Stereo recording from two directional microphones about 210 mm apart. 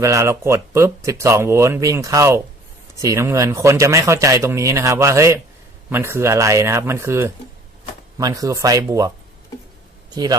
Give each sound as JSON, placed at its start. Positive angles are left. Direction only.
{"t": 0.0, "sound": "speech", "side_deg": -15}
{"t": 10.2, "sound": "speech", "side_deg": -20}